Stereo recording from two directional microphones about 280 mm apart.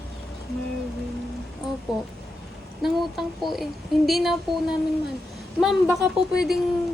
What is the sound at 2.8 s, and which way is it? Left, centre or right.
A woman's voice, centre.